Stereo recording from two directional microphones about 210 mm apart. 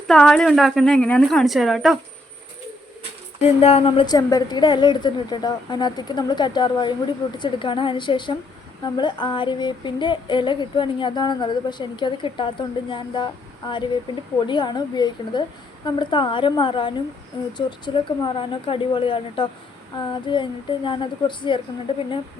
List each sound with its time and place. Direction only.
0.1 s a woman's voice: 5° left (ahead or behind)
3.4 s speech: 30° left (ahead or behind)